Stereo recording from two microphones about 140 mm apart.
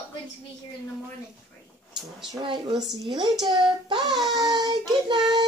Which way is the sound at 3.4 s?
30° right (ahead or behind).